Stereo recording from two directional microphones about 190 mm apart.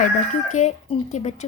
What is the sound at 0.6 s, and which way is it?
Speech, 40° left (ahead or behind).